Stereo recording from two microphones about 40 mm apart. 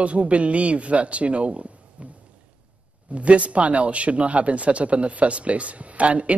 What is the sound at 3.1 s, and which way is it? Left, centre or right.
Speech, right.